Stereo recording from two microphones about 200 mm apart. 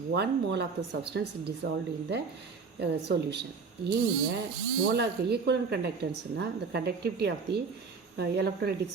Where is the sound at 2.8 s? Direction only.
55° right (ahead or behind).